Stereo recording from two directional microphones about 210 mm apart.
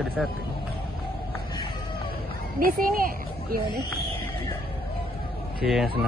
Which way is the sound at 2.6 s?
40° right (ahead or behind).